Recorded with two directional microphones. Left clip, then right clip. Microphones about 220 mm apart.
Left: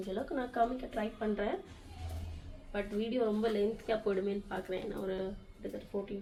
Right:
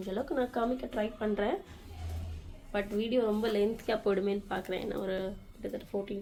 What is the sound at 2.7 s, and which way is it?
Speech, 55° right (ahead or behind).